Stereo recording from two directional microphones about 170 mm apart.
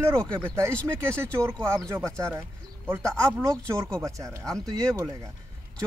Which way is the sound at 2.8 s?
15° right (ahead or behind).